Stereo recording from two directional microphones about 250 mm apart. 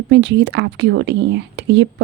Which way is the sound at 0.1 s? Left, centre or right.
Right.